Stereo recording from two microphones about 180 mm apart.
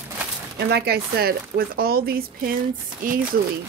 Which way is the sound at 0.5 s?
65° right (ahead or behind).